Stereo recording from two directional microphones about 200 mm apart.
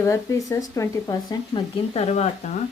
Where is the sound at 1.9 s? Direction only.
30° left (ahead or behind).